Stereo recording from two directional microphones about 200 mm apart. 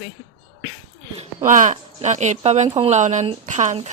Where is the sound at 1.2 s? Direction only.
40° right (ahead or behind).